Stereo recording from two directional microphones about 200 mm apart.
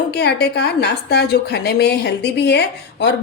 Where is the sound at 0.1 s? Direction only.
55° left (ahead or behind).